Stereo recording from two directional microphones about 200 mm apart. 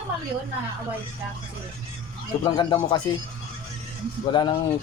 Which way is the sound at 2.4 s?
25° left (ahead or behind).